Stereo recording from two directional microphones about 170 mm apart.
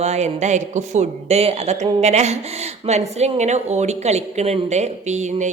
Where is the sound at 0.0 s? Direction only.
40° right (ahead or behind).